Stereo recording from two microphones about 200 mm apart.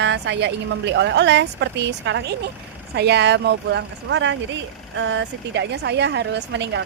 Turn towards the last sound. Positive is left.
turn(degrees=-60)  # may be behind; listen again after turning